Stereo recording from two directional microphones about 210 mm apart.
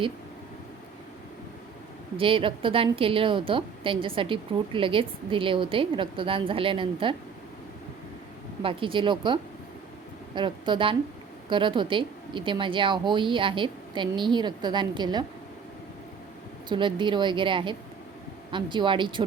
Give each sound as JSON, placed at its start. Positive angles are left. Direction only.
{"t": 2.1, "sound": "a woman's voice", "side_deg": -25}
{"t": 8.6, "sound": "a woman's voice", "side_deg": -25}
{"t": 16.6, "sound": "a woman's voice", "side_deg": -20}